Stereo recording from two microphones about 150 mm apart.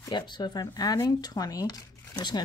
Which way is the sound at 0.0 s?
30° left (ahead or behind).